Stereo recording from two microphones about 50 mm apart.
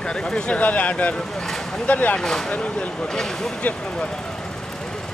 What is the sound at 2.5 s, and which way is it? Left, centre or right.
Speech, left.